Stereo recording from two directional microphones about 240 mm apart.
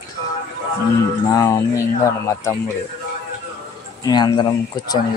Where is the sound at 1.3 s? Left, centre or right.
Centre.